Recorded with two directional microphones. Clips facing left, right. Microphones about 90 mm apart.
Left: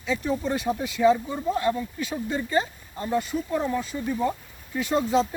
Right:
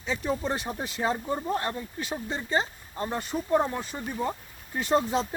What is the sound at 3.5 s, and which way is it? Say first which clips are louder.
Speech: right 2 dB; 45° right (ahead or behind).